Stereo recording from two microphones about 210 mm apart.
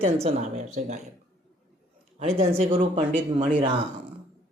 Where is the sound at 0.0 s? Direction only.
30° right (ahead or behind).